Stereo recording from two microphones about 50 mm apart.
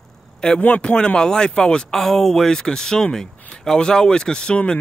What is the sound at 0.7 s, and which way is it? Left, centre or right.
Speech, left.